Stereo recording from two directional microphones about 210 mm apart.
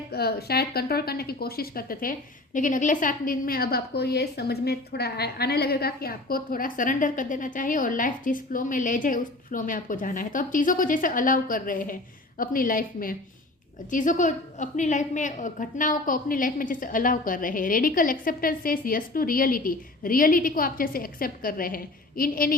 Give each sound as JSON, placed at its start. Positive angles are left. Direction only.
{"t": 0.1, "sound": "a woman's voice", "side_deg": 50}